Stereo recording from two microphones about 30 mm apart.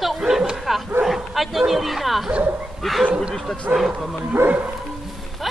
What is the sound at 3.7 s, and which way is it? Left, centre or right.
Speech, right.